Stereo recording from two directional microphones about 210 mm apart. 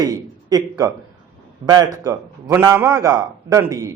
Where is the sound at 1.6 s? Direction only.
20° right (ahead or behind).